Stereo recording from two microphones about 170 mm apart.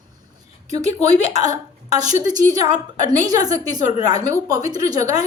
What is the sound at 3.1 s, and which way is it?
A woman's voice, 20° right (ahead or behind).